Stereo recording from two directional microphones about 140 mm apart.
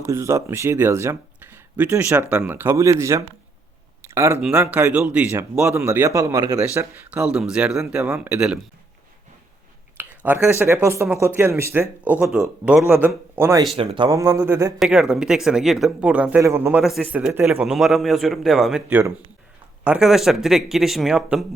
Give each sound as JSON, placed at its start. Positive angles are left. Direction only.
{"t": 0.0, "sound": "speech", "side_deg": -20}
{"t": 4.0, "sound": "a sound", "side_deg": -20}
{"t": 4.4, "sound": "a man's voice", "side_deg": -5}
{"t": 10.0, "sound": "a man's voice", "side_deg": -15}
{"t": 13.7, "sound": "speech", "side_deg": -35}
{"t": 14.1, "sound": "speech", "side_deg": -20}
{"t": 14.8, "sound": "a man's voice", "side_deg": -5}
{"t": 16.4, "sound": "a man's voice", "side_deg": -20}
{"t": 16.8, "sound": "a man's voice", "side_deg": 0}
{"t": 17.1, "sound": "a man's voice", "side_deg": -10}